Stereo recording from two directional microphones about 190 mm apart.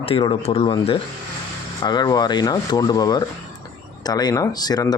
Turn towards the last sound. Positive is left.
turn(degrees=20)  # may be behind; listen again after turning